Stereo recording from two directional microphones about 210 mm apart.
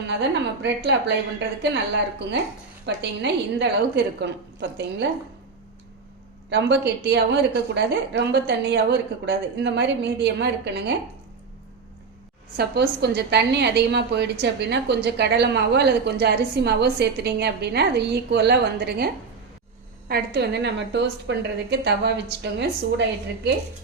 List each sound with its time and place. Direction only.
0.1 s a woman's voice: 55° right (ahead or behind)
6.5 s a woman's voice: 55° right (ahead or behind)
12.5 s a woman's voice: 50° right (ahead or behind)